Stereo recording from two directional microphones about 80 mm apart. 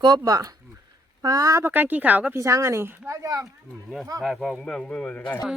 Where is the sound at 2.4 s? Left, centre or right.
Right.